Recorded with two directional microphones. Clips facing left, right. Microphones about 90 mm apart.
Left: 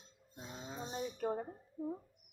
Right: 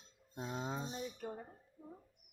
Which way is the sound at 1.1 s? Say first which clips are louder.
Left 8 dB; 50° left (ahead or behind).